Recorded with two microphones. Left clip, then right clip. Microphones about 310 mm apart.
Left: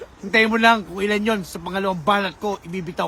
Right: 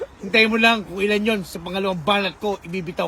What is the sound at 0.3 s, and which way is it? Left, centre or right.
Speech, centre.